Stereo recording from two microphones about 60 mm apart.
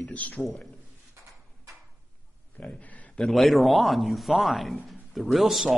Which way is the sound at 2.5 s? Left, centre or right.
Left.